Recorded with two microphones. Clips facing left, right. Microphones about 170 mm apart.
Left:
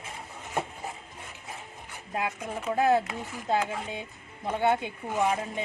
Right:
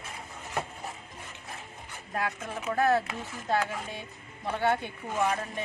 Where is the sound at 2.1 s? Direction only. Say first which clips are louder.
Left 1 dB; 15° left (ahead or behind).